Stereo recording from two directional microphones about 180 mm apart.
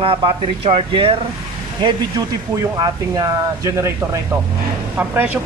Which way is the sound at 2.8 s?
20° right (ahead or behind).